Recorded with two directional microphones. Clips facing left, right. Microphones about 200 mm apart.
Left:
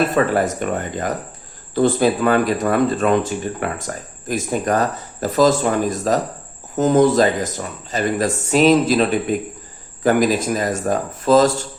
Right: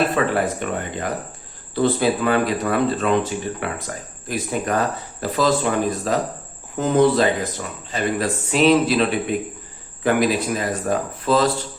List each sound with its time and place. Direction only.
0.1 s speech: 45° left (ahead or behind)